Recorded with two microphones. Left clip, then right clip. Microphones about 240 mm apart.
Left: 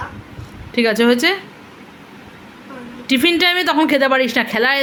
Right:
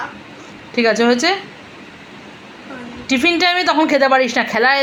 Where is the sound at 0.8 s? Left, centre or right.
Left.